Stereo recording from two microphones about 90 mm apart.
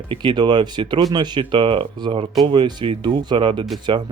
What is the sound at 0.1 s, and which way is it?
Speech, 65° right (ahead or behind).